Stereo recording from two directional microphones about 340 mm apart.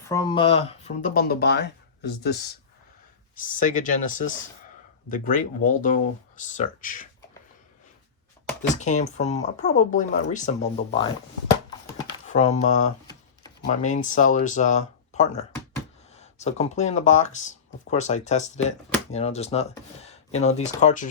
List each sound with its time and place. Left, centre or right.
0.1 s speech: centre; by 2.4 s left
3.4 s speech: left
8.6 s speech: left
12.3 s speech: centre